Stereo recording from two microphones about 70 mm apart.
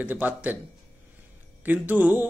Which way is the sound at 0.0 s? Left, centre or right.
Right.